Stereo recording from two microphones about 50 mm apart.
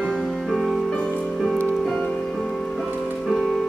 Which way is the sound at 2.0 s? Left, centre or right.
Centre.